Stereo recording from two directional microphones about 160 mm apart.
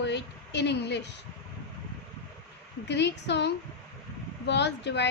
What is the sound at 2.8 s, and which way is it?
A woman's voice, 90° left.